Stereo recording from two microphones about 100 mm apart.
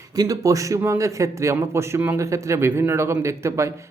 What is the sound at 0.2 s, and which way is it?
A man's voice, 35° right (ahead or behind).